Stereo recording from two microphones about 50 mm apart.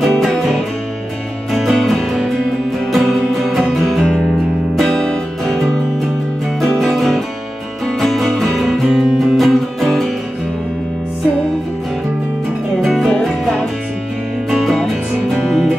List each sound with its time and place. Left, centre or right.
0.0 s music: centre
5.4 s music: centre
8.8 s music: centre
9.2 s music: centre
12.8 s music: centre
14.5 s music: centre